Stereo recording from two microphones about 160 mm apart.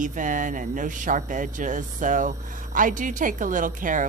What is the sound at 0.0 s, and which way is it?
A woman's voice, 55° right (ahead or behind).